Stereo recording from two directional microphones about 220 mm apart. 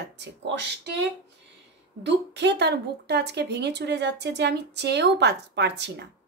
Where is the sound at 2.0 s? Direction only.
50° right (ahead or behind).